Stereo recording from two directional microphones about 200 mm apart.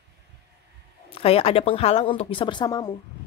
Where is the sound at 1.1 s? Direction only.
30° left (ahead or behind).